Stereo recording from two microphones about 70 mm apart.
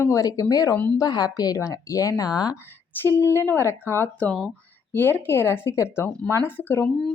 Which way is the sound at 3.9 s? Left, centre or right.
Left.